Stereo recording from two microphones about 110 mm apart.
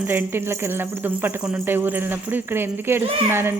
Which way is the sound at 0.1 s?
20° right (ahead or behind).